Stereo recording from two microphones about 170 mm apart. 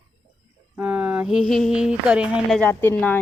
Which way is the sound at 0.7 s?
10° right (ahead or behind).